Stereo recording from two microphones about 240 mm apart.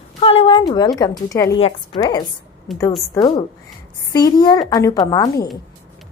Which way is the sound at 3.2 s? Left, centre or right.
Centre.